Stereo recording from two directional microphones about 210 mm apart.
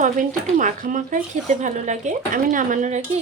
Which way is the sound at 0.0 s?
40° right (ahead or behind).